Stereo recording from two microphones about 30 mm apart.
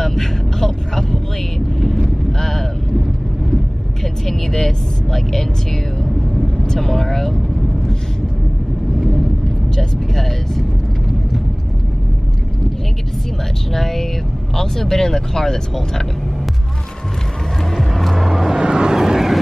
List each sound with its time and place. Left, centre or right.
0.0 s vehicle: centre
4.3 s vehicle: centre
9.8 s vehicle: centre
13.7 s vehicle: centre
17.9 s vehicle: centre
18.2 s vehicle: centre
18.5 s vehicle: right
18.9 s vehicle: centre